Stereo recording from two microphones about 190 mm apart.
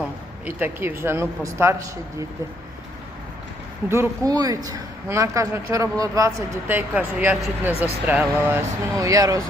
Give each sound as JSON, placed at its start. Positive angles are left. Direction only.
{"t": 0.4, "sound": "speech", "side_deg": -10}
{"t": 3.8, "sound": "speech", "side_deg": -15}